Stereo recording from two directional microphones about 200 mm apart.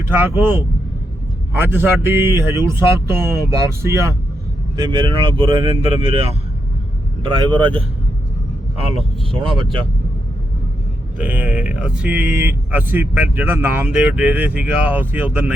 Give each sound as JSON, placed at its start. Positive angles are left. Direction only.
{"t": 0.1, "sound": "speech", "side_deg": -10}
{"t": 9.0, "sound": "speech", "side_deg": -25}
{"t": 11.2, "sound": "speech", "side_deg": -10}